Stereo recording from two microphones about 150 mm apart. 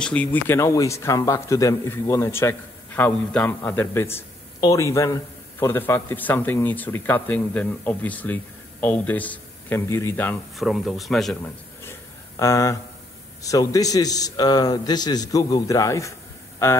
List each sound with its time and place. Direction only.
0.0 s speech: 10° left (ahead or behind)
10.5 s speech: centre (ahead or behind)
11.4 s a sound: 15° left (ahead or behind)
13.4 s a man's voice: 20° left (ahead or behind)